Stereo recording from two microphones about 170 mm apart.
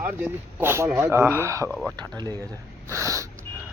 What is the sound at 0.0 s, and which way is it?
Speech, 10° right (ahead or behind).